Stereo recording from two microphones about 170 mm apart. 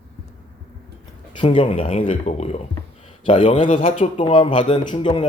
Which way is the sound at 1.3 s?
30° left (ahead or behind).